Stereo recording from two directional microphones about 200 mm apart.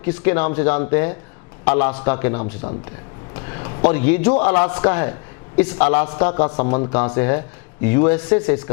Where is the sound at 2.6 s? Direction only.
30° left (ahead or behind).